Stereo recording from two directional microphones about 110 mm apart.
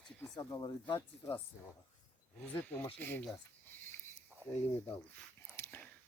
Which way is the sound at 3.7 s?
20° left (ahead or behind).